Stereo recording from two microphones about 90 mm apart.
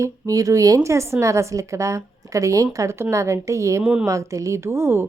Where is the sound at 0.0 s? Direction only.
40° right (ahead or behind).